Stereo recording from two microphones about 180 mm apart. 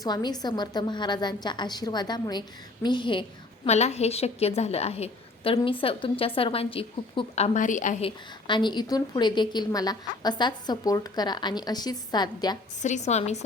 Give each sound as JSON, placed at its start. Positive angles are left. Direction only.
{"t": 0.0, "sound": "a woman's voice", "side_deg": 25}
{"t": 8.0, "sound": "a woman's voice", "side_deg": 25}
{"t": 12.8, "sound": "a woman's voice", "side_deg": 40}